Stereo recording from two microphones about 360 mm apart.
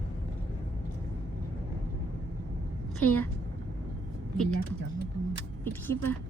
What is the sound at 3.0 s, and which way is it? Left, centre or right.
Speech, centre.